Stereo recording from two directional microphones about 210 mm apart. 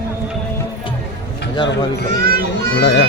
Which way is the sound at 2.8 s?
55° left (ahead or behind).